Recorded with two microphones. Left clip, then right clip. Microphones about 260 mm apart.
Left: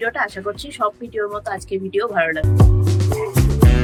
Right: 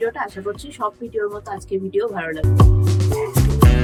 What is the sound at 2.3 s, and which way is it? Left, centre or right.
Music, centre.